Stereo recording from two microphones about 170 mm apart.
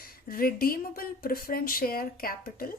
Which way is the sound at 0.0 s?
60° left (ahead or behind).